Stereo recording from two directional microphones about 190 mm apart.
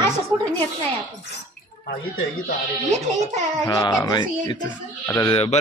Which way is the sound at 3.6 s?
20° left (ahead or behind).